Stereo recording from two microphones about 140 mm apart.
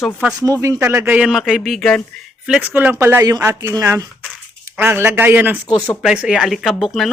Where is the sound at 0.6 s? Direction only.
20° right (ahead or behind).